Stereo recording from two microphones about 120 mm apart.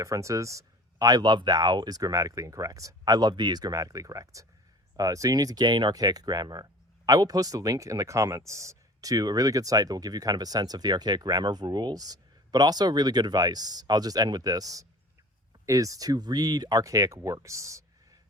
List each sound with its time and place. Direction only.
0.0 s speech: 25° right (ahead or behind)